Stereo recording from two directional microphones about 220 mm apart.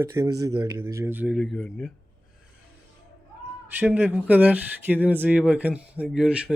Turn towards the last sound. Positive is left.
turn(degrees=-5)  # may be behind; listen again after turning